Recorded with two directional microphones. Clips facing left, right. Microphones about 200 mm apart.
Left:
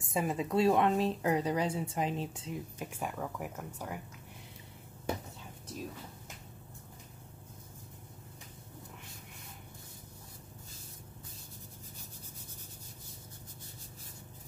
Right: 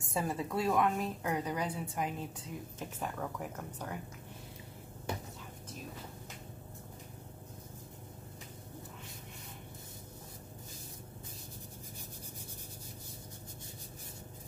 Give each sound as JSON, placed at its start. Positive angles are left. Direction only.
{"t": 0.0, "sound": "speech", "side_deg": 15}
{"t": 2.8, "sound": "speech", "side_deg": 10}